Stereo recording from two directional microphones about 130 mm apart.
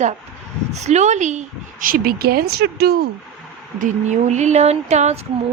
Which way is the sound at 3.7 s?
65° right (ahead or behind).